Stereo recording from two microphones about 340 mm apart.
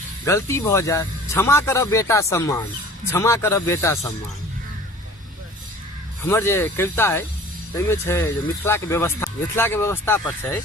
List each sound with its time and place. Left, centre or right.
0.3 s speech: centre
6.2 s speech: centre